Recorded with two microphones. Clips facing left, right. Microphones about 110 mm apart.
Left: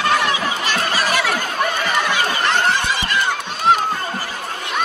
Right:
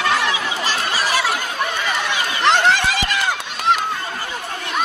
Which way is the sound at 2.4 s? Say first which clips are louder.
Right 5 dB; 90° right.